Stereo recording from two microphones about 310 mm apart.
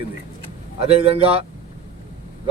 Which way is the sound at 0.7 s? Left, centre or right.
Centre.